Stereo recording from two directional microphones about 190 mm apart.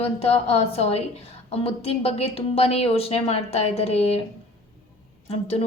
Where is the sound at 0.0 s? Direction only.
30° left (ahead or behind).